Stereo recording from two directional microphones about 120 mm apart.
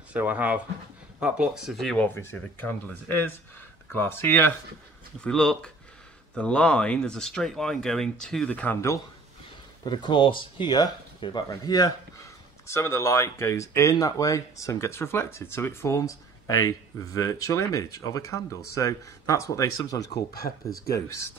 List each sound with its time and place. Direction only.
0.1 s speech: 15° right (ahead or behind); by 2.0 s 5° left (ahead or behind)
3.1 s speech: 15° left (ahead or behind)
5.2 s speech: 5° left (ahead or behind)
9.8 s speech: 40° left (ahead or behind); by 21.3 s 25° left (ahead or behind)